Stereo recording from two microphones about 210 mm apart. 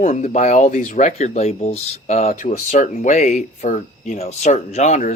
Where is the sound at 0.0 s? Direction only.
35° left (ahead or behind).